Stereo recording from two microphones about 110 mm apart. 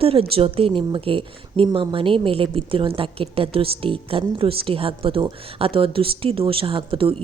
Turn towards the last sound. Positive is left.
turn(degrees=-55)  # may be behind; listen again after turning